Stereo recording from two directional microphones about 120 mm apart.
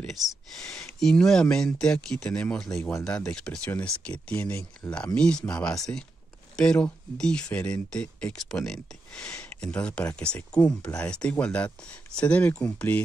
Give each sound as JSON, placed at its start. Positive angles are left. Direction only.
{"t": 0.0, "sound": "speech", "side_deg": 0}